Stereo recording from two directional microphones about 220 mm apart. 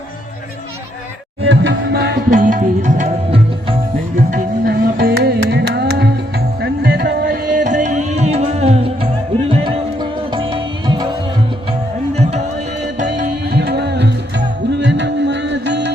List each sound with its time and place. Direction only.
1.5 s tabla: 50° right (ahead or behind); by 3.8 s 25° right (ahead or behind)
4.3 s music: 40° right (ahead or behind); by 11.1 s 20° right (ahead or behind)
12.1 s music: 30° right (ahead or behind)
13.5 s music: 45° right (ahead or behind)